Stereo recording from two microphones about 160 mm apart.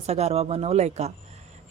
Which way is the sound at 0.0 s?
40° right (ahead or behind).